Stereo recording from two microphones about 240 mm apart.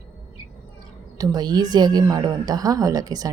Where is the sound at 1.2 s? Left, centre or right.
Centre.